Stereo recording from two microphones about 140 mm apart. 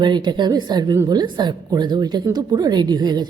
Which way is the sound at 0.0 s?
30° right (ahead or behind).